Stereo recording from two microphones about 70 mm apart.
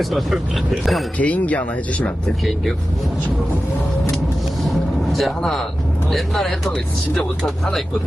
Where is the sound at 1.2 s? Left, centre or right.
Left.